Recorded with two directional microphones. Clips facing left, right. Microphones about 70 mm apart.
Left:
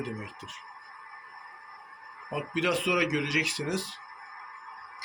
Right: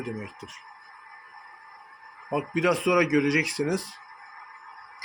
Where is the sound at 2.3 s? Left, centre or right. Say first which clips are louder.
Right 4 dB; right.